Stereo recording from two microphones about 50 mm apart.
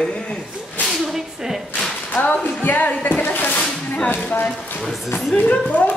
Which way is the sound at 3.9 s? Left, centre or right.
Left.